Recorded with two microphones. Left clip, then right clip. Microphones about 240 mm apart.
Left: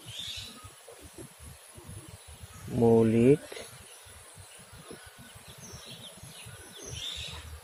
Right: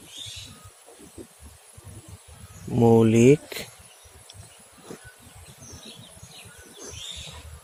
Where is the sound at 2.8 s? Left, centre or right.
Right.